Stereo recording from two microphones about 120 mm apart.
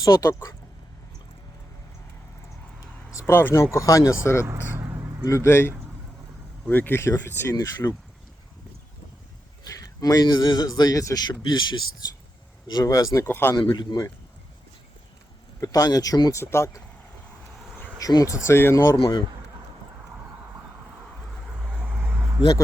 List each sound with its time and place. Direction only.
0.0 s speech: 25° left (ahead or behind)
3.1 s speech: 25° left (ahead or behind)
4.4 s vehicle: 25° right (ahead or behind)
5.2 s speech: 25° left (ahead or behind)
9.6 s a man's voice: 30° left (ahead or behind)
13.7 s a man's voice: 35° left (ahead or behind)
15.6 s a man's voice: 30° left (ahead or behind)
18.0 s a man's voice: 30° left (ahead or behind)
18.9 s speech: 45° left (ahead or behind)
21.8 s vehicle: 10° right (ahead or behind)